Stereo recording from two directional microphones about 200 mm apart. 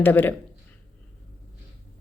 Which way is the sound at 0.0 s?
10° left (ahead or behind).